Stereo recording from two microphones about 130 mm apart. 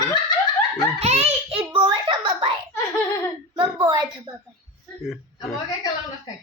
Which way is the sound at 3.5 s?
40° right (ahead or behind).